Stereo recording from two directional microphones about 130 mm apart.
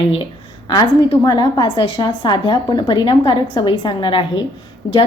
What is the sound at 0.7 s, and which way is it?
A woman's voice, 30° left (ahead or behind).